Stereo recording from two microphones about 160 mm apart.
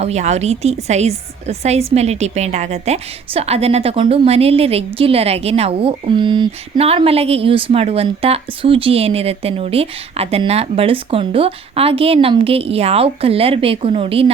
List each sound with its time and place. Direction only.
0.0 s a woman's voice: 45° right (ahead or behind)